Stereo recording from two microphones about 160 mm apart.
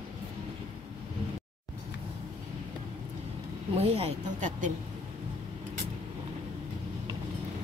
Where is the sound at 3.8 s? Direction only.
40° right (ahead or behind).